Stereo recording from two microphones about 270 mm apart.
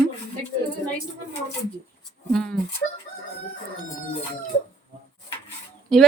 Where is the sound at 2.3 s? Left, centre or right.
Centre.